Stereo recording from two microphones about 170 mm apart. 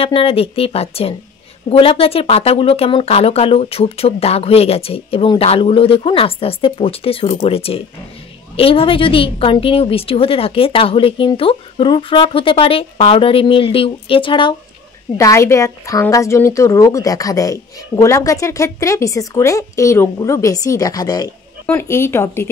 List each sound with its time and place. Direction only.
0.0 s speech: 35° left (ahead or behind)
15.1 s a woman's voice: 15° left (ahead or behind)